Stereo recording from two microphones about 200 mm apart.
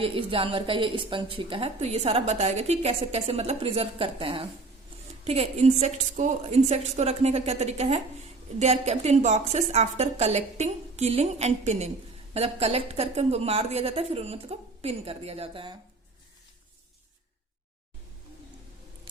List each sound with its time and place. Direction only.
0.0 s a woman's voice: 25° right (ahead or behind)